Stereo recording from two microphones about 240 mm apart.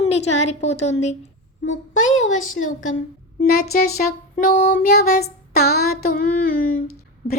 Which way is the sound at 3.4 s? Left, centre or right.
Left.